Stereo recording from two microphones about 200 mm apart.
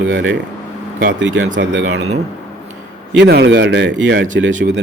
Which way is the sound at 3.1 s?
60° right (ahead or behind).